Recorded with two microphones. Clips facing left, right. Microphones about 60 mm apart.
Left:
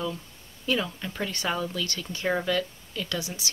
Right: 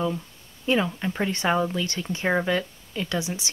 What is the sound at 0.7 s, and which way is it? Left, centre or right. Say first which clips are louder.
Speech: right 5 dB; right.